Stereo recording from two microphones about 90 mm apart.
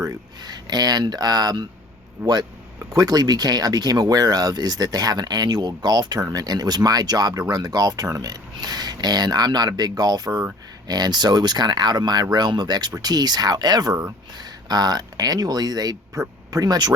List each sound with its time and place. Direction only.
0.0 s speech: 45° right (ahead or behind)